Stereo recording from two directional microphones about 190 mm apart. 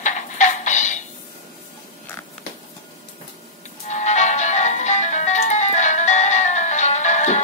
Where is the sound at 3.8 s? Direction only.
40° left (ahead or behind).